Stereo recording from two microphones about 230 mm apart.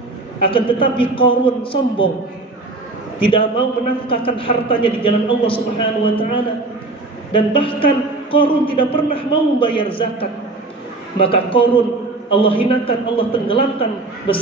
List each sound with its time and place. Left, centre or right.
0.5 s a man's voice: left
3.3 s a man's voice: left